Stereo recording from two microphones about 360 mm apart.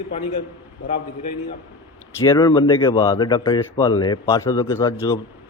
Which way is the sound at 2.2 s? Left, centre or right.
Centre.